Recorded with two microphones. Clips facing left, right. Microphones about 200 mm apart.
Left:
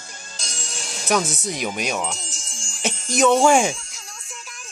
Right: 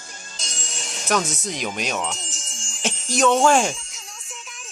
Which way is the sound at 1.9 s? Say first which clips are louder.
Left 1 dB; centre (ahead or behind).